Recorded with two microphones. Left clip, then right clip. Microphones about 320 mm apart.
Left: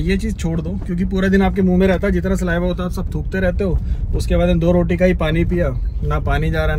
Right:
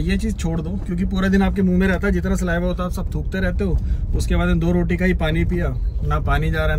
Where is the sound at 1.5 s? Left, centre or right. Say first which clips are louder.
Left 4 dB; left.